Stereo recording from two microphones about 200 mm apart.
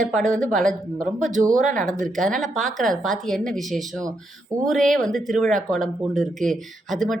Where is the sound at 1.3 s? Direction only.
40° right (ahead or behind).